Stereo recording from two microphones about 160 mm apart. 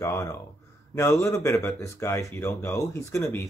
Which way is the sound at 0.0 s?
15° left (ahead or behind).